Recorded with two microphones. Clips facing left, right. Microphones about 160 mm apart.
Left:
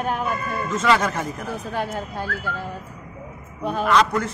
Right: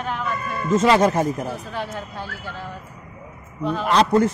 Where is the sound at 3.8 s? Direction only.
30° right (ahead or behind).